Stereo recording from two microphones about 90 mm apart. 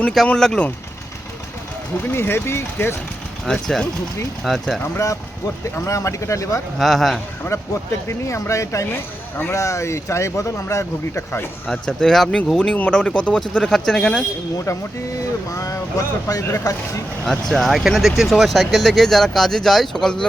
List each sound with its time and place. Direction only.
0.3 s speech: 10° left (ahead or behind)
2.1 s speech: 25° left (ahead or behind)
3.4 s speech: 5° left (ahead or behind)
4.8 s speech: 35° left (ahead or behind)
6.7 s speech: centre (ahead or behind)
7.4 s speech: 30° left (ahead or behind)
11.7 s speech: 5° left (ahead or behind)
15.4 s speech: 40° left (ahead or behind)
17.5 s speech: centre (ahead or behind)